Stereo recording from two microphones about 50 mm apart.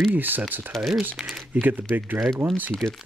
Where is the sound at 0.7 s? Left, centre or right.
Centre.